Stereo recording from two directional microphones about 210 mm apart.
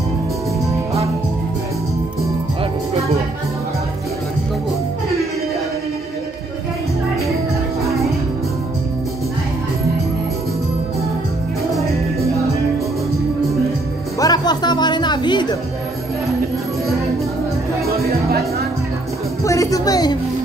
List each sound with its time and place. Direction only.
7.8 s music: centre (ahead or behind)
11.7 s music: centre (ahead or behind)
14.2 s a sound: 20° left (ahead or behind)
18.1 s music: 50° right (ahead or behind)
19.4 s music: 15° left (ahead or behind)